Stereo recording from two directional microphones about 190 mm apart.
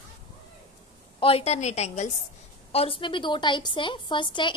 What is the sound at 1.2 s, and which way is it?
A woman's voice, 30° left (ahead or behind).